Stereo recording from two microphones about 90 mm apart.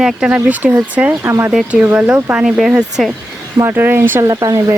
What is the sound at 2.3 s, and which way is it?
Speech, 5° right (ahead or behind).